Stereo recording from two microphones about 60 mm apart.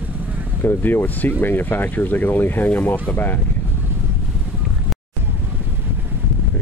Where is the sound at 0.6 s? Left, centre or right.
Left.